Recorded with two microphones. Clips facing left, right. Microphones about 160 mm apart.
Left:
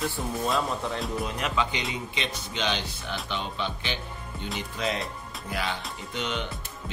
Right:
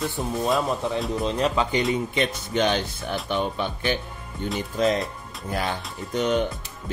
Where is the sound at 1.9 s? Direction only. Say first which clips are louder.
Right 9 dB; 50° right (ahead or behind).